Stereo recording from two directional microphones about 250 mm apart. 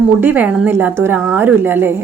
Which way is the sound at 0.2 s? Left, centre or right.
Centre.